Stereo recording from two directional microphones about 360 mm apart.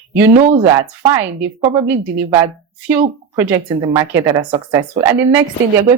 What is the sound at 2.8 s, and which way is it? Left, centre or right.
Speech, centre.